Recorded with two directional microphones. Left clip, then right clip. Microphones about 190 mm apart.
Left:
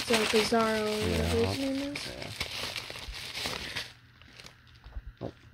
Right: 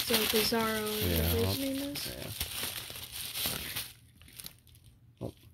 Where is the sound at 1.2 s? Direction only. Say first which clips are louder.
Left 3 dB; 10° right (ahead or behind).